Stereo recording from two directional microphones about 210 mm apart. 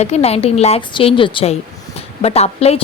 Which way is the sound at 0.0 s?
30° left (ahead or behind).